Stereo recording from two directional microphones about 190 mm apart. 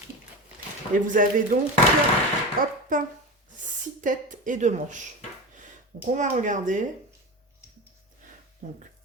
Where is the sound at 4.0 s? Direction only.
45° right (ahead or behind).